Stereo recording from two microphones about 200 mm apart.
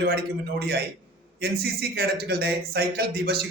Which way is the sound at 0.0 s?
55° right (ahead or behind).